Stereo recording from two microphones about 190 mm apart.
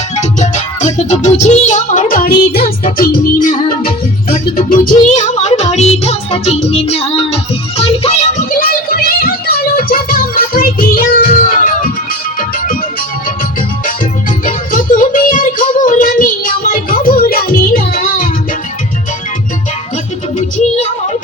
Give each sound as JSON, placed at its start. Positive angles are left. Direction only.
{"t": 0.2, "sound": "music", "side_deg": 40}
{"t": 5.2, "sound": "music", "side_deg": 35}
{"t": 8.5, "sound": "music", "side_deg": 50}
{"t": 14.4, "sound": "music", "side_deg": 45}